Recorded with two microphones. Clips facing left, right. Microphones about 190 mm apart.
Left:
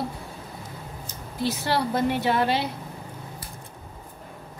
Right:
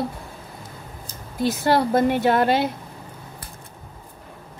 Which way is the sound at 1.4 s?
50° right (ahead or behind).